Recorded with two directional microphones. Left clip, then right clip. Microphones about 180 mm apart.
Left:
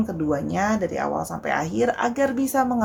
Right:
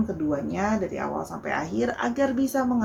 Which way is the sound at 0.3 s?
50° left (ahead or behind).